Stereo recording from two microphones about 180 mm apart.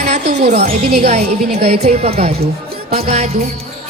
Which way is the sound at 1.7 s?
35° right (ahead or behind).